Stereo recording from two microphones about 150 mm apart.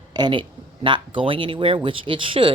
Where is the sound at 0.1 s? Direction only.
30° right (ahead or behind).